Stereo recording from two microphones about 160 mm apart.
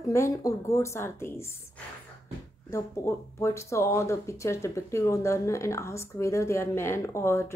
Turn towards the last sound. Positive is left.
turn(degrees=15)  # may be behind; listen again after turning